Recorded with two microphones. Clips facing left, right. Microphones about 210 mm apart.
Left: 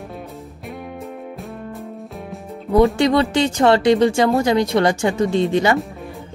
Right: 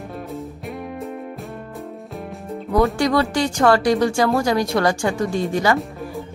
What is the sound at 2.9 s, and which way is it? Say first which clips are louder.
Speech: left 3 dB; 25° left (ahead or behind).